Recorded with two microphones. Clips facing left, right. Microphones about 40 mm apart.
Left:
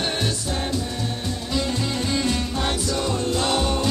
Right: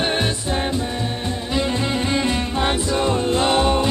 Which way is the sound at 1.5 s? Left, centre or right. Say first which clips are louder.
Right 4 dB; right.